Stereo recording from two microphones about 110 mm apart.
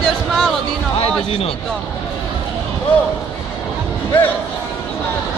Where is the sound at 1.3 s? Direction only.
60° left (ahead or behind).